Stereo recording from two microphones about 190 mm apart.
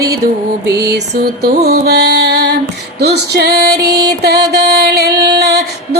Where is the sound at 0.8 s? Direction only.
55° right (ahead or behind).